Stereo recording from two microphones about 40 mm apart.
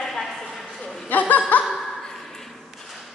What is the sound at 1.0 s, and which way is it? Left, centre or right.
Chuckle, left.